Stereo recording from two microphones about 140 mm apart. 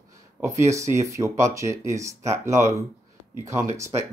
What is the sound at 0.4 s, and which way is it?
Speech, 20° right (ahead or behind).